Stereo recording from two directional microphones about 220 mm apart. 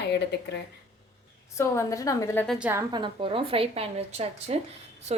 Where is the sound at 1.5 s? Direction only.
10° left (ahead or behind).